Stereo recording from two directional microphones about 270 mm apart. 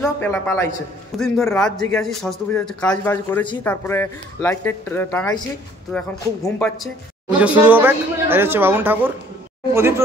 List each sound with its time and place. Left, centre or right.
0.0 s a man's voice: centre